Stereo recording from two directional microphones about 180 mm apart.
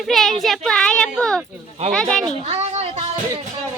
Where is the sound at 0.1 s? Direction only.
Centre (ahead or behind).